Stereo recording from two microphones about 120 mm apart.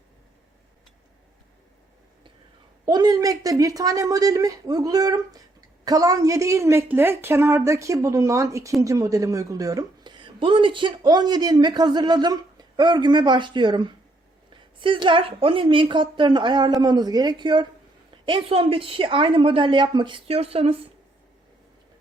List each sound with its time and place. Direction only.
2.8 s a woman's voice: 35° right (ahead or behind)
20.2 s speech: 55° right (ahead or behind)